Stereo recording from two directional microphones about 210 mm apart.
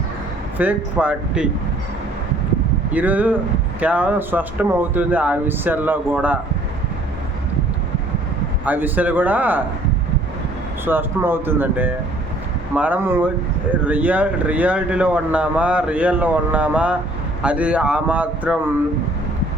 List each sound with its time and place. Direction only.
0.6 s speech: 5° right (ahead or behind)
2.9 s speech: 5° right (ahead or behind)
8.6 s speech: 10° right (ahead or behind)
10.8 s speech: 10° right (ahead or behind)